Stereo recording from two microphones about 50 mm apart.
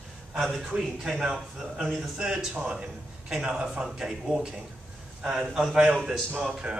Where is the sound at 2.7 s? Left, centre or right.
Centre.